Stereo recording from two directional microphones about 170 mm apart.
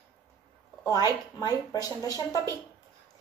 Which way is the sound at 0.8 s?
20° left (ahead or behind).